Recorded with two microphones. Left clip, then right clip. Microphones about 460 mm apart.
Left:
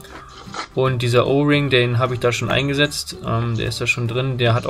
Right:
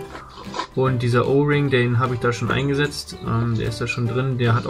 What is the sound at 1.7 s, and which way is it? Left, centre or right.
Speech, centre.